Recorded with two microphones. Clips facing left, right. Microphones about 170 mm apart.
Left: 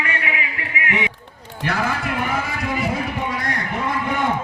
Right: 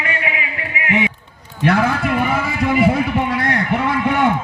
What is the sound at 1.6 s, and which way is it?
A man's voice, 60° right (ahead or behind).